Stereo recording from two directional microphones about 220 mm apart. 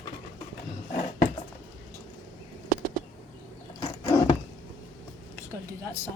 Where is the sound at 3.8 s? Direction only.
20° left (ahead or behind).